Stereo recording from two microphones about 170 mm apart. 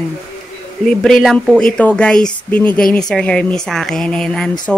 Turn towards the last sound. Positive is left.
turn(degrees=5)  # may be behind; listen again after turning